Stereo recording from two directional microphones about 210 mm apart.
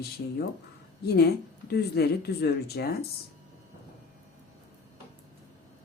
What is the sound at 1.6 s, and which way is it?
Speech, 50° left (ahead or behind).